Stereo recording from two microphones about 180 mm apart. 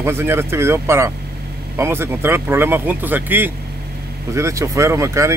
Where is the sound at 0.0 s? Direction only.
15° right (ahead or behind).